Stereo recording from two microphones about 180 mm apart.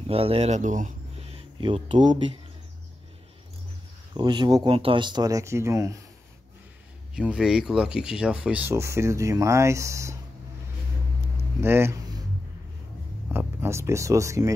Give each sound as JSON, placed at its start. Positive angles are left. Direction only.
{"t": 0.0, "sound": "speech", "side_deg": -30}
{"t": 4.1, "sound": "speech", "side_deg": -25}
{"t": 7.2, "sound": "speech", "side_deg": -5}
{"t": 11.6, "sound": "a sound", "side_deg": -15}
{"t": 13.3, "sound": "speech", "side_deg": -10}